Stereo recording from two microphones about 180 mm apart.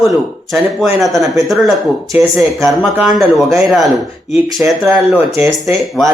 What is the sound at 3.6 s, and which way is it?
Speech, centre (ahead or behind).